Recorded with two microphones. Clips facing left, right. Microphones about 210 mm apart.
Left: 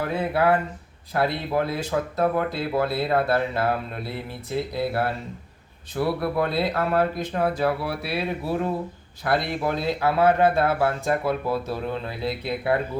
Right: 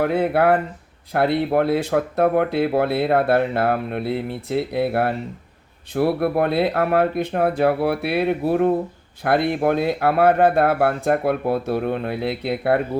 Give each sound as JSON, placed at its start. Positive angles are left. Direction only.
{"t": 0.0, "sound": "speech", "side_deg": -60}